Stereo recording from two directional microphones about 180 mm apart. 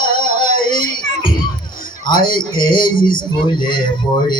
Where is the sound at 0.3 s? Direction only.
25° left (ahead or behind).